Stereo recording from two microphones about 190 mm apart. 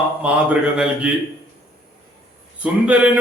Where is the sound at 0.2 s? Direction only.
5° right (ahead or behind).